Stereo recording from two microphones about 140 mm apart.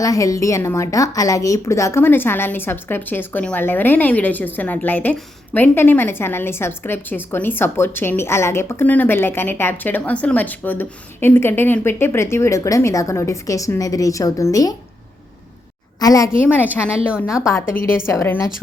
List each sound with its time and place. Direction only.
0.0 s a woman's voice: 25° left (ahead or behind)
16.0 s a woman's voice: 25° left (ahead or behind)
16.6 s a woman's voice: 10° right (ahead or behind)
17.4 s a woman's voice: 20° left (ahead or behind)